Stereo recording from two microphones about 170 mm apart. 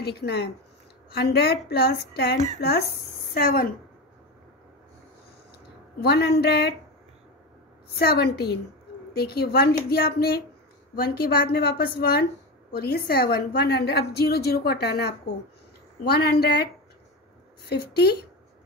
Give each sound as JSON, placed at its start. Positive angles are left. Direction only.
{"t": 0.0, "sound": "a woman's voice", "side_deg": 75}
{"t": 6.0, "sound": "a woman's voice", "side_deg": 70}
{"t": 7.9, "sound": "a woman's voice", "side_deg": 65}
{"t": 17.6, "sound": "a woman's voice", "side_deg": 75}